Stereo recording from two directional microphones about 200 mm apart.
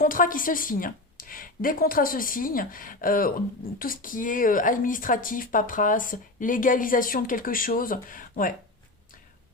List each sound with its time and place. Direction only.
0.0 s a woman's voice: 45° left (ahead or behind)